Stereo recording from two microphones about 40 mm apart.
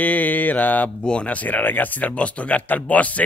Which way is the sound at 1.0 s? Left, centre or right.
Left.